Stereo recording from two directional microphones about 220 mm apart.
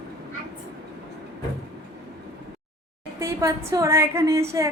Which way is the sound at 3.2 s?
15° right (ahead or behind).